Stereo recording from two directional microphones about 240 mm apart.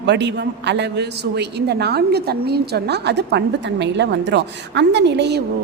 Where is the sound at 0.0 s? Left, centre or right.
Right.